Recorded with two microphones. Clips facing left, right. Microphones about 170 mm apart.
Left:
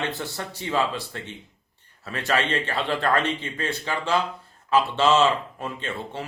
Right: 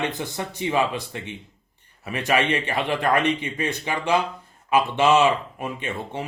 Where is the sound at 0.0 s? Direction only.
15° right (ahead or behind).